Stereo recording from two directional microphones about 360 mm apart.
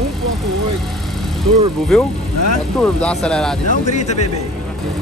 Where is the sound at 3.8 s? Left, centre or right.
Centre.